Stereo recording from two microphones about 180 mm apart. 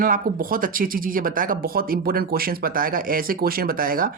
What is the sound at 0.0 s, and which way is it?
Speech, 50° right (ahead or behind).